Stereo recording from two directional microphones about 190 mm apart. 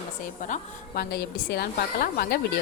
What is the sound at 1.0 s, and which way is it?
A woman's voice, 55° left (ahead or behind).